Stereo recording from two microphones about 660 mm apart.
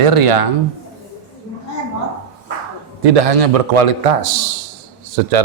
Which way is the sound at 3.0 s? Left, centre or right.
Right.